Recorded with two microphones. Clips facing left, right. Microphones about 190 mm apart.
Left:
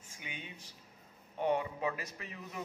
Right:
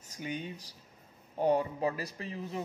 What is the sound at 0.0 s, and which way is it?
Speech, 40° right (ahead or behind).